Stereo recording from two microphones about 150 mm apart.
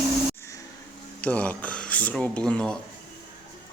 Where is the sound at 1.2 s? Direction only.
10° left (ahead or behind).